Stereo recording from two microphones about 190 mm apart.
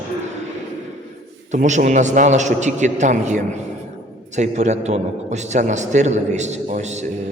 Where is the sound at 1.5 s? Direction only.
40° right (ahead or behind).